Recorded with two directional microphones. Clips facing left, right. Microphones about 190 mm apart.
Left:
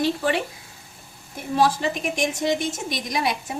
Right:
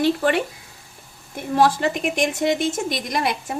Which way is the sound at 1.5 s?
60° right (ahead or behind).